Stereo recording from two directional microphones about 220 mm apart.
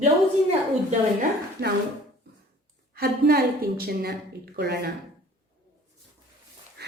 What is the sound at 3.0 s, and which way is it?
A woman's voice, 45° right (ahead or behind).